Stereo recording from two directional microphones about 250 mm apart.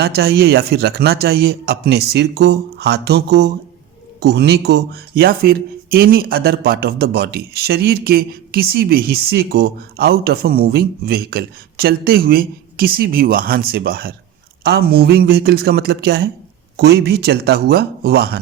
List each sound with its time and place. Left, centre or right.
0.0 s speech: right